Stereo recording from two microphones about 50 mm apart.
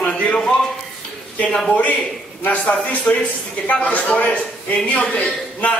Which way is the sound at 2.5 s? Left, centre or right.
Left.